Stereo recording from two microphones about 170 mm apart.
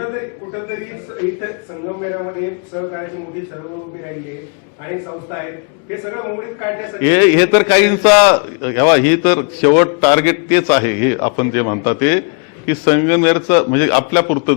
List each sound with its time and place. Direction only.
0.0 s a sound: 20° left (ahead or behind)
1.9 s a man's voice: 20° left (ahead or behind)
4.9 s a man's voice: 20° left (ahead or behind)